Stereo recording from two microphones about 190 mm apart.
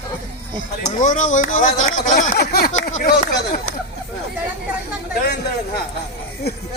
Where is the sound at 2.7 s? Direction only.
40° left (ahead or behind).